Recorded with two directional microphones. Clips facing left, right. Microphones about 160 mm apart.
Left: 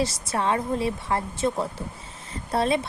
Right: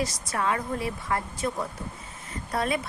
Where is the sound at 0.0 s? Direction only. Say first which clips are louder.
Left 3 dB; 30° left (ahead or behind).